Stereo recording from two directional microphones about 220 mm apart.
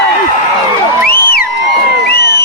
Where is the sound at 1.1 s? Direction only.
45° left (ahead or behind).